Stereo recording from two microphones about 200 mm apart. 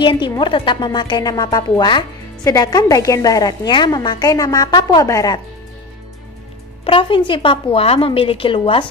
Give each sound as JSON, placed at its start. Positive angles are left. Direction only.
{"t": 0.0, "sound": "a woman's voice", "side_deg": 25}
{"t": 6.8, "sound": "a woman's voice", "side_deg": 25}